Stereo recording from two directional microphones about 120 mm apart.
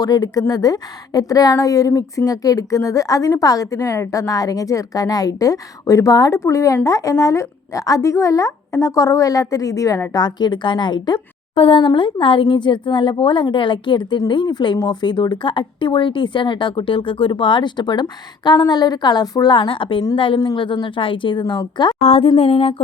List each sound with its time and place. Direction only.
0.0 s a woman's voice: 35° left (ahead or behind)
22.0 s a woman's voice: 55° left (ahead or behind)